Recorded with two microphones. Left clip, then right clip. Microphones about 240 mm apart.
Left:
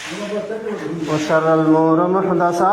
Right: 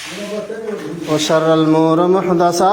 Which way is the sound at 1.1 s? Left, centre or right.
Right.